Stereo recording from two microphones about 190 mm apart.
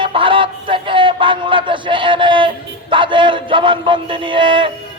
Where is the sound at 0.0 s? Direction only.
25° right (ahead or behind).